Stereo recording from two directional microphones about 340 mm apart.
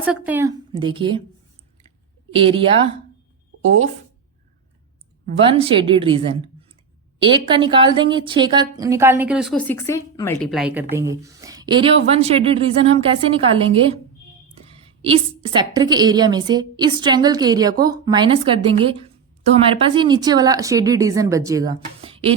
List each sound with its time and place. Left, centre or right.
0.0 s a woman's voice: centre
2.3 s a woman's voice: centre
5.4 s a woman's voice: centre